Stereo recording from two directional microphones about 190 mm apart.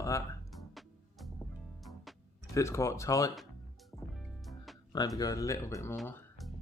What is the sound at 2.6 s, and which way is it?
Speech, 15° left (ahead or behind).